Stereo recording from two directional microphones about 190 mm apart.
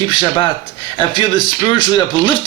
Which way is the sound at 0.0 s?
25° left (ahead or behind).